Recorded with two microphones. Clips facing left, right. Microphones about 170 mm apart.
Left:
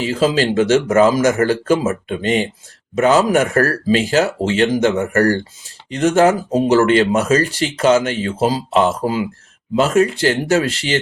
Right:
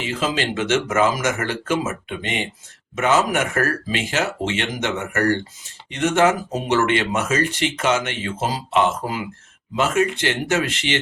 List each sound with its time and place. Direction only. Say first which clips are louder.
0.0 s speech: left 7 dB; 35° left (ahead or behind)